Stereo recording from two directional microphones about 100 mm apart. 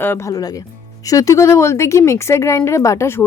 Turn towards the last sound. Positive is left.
turn(degrees=25)  # may be behind; listen again after turning